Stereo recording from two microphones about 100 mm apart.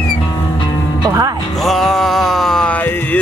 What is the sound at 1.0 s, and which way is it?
Music, 40° right (ahead or behind).